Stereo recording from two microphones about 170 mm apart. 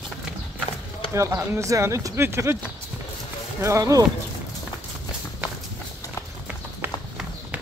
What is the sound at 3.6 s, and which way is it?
Speech, 20° right (ahead or behind).